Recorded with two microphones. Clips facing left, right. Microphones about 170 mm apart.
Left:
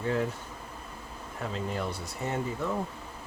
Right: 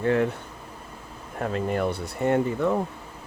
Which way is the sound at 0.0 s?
65° right (ahead or behind).